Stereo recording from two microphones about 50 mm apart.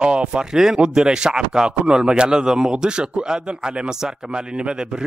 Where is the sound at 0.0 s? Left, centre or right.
Centre.